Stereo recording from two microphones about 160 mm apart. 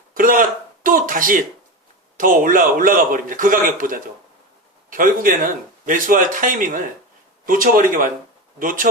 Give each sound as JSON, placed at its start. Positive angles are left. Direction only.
{"t": 0.1, "sound": "speech", "side_deg": -60}